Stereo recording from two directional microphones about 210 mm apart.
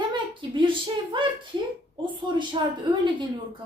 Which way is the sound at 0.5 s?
25° right (ahead or behind).